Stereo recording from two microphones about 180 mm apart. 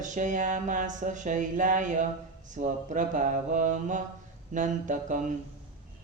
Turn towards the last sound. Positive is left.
turn(degrees=-45)  # may be behind; listen again after turning